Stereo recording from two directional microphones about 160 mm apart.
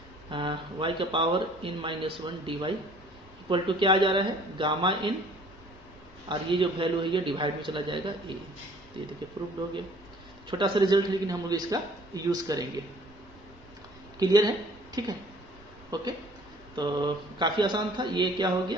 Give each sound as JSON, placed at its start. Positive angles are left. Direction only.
{"t": 0.3, "sound": "speech", "side_deg": -30}
{"t": 6.2, "sound": "speech", "side_deg": -30}
{"t": 10.6, "sound": "speech", "side_deg": -30}
{"t": 14.2, "sound": "speech", "side_deg": -25}